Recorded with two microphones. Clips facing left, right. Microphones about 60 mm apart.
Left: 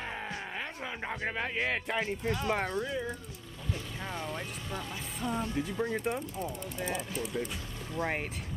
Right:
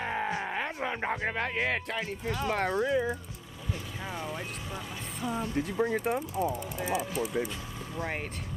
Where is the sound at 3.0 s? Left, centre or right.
Centre.